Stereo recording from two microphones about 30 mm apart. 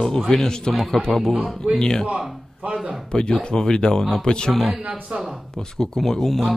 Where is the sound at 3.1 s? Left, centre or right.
Left.